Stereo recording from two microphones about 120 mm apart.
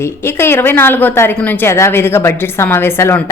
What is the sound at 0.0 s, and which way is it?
A woman's voice, 20° left (ahead or behind).